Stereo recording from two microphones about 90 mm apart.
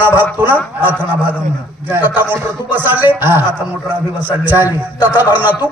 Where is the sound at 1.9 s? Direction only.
20° right (ahead or behind).